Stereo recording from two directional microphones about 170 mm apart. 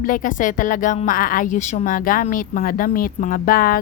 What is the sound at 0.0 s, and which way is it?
Speech, 50° left (ahead or behind).